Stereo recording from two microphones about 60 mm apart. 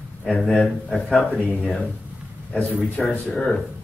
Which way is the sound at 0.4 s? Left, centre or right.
Centre.